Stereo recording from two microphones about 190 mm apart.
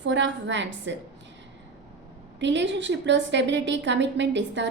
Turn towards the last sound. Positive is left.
turn(degrees=-70)  # may be behind; listen again after turning